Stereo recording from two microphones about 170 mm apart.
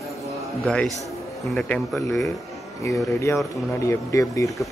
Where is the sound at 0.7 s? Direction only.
5° left (ahead or behind).